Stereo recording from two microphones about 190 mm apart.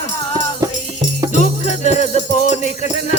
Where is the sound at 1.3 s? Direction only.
35° left (ahead or behind).